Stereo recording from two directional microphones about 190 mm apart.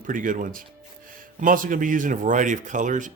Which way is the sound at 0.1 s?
45° right (ahead or behind).